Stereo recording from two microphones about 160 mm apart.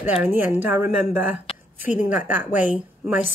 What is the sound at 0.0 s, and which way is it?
A woman's voice, 10° right (ahead or behind).